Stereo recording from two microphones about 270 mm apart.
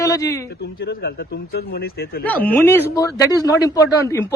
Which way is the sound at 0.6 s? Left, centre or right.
Left.